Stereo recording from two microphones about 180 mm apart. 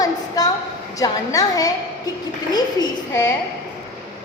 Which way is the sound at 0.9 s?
20° left (ahead or behind).